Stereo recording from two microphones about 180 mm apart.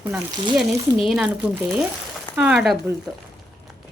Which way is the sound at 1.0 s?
5° right (ahead or behind).